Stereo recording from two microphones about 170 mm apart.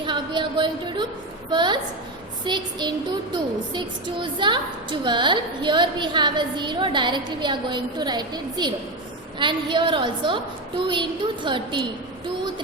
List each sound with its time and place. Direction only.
0.0 s a woman's voice: 25° right (ahead or behind)